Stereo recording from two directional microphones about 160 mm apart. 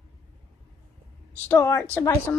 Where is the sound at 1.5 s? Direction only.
15° left (ahead or behind).